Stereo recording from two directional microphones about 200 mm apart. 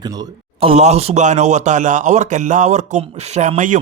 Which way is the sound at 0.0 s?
20° right (ahead or behind).